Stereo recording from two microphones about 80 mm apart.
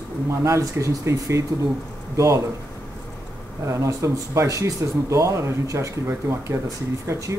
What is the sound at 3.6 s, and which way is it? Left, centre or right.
Speech, right.